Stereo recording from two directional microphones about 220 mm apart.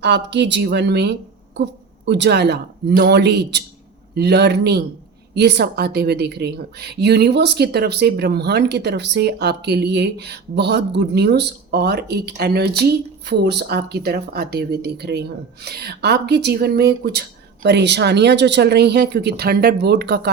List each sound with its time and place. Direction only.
0.0 s a woman's voice: 50° right (ahead or behind)